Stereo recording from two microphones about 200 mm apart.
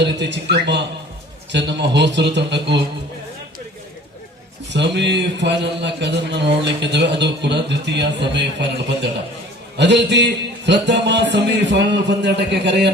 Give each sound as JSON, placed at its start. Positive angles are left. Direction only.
{"t": 0.0, "sound": "a man's voice", "side_deg": -60}
{"t": 4.7, "sound": "a man's voice", "side_deg": -60}